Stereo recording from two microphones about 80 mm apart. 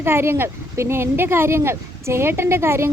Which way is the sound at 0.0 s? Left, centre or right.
Right.